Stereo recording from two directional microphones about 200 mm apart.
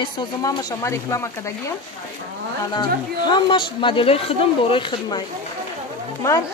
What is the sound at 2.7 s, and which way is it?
Speech, 20° left (ahead or behind).